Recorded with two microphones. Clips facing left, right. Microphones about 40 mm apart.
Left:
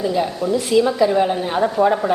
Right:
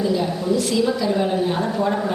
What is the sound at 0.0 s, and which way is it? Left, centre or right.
A woman's voice, left.